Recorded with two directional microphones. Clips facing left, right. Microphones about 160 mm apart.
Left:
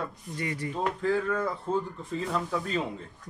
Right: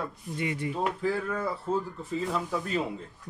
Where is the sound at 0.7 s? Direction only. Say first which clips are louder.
Left 3 dB; 5° right (ahead or behind).